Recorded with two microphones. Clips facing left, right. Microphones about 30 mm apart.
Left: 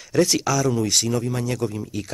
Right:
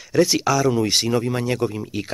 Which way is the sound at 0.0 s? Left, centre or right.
Centre.